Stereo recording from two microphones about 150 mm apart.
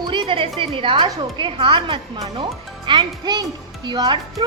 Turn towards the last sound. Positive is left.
turn(degrees=-30)  # may be behind; listen again after turning